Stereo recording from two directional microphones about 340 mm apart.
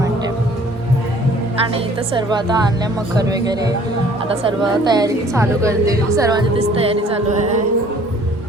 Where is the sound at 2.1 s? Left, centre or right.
Centre.